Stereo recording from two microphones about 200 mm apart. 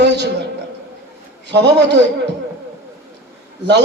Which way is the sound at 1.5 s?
60° right (ahead or behind).